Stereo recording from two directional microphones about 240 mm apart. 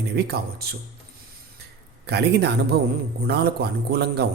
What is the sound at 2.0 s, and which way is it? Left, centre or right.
A man's voice, right.